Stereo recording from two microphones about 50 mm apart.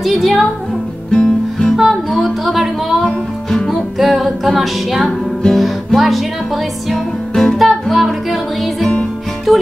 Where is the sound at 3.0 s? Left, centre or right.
Centre.